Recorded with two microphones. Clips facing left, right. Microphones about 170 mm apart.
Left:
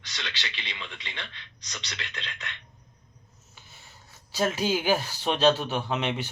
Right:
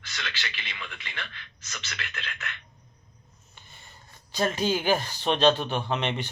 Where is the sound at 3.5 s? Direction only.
5° left (ahead or behind).